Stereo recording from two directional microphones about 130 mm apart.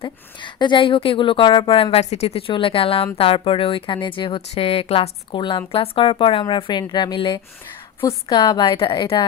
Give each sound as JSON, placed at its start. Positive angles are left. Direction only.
{"t": 0.0, "sound": "a woman's voice", "side_deg": 40}